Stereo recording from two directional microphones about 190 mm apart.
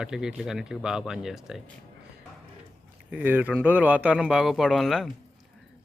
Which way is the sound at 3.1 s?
10° right (ahead or behind).